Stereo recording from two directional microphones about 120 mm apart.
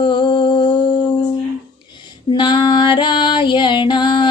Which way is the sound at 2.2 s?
40° left (ahead or behind).